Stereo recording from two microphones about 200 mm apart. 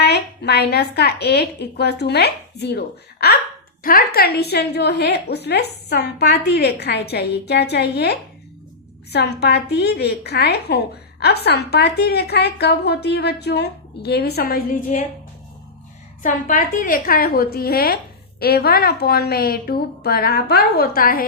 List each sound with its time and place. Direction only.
0.0 s a woman's voice: 55° left (ahead or behind)
16.2 s a woman's voice: 40° left (ahead or behind)